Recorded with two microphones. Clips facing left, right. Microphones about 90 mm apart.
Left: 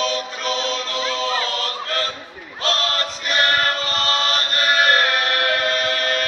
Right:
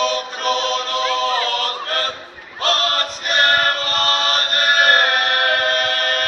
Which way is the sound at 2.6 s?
50° right (ahead or behind).